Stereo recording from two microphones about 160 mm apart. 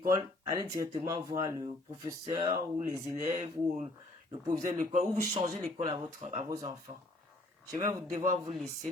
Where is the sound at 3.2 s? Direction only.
50° right (ahead or behind).